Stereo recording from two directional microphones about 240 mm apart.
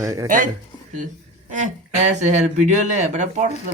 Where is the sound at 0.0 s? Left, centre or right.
Centre.